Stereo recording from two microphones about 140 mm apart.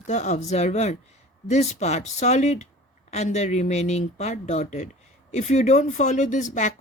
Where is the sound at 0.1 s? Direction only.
55° left (ahead or behind).